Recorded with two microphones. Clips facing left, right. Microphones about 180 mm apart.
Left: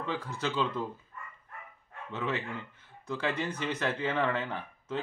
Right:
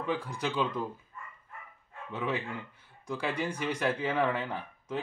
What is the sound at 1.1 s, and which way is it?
Dog, 65° left (ahead or behind).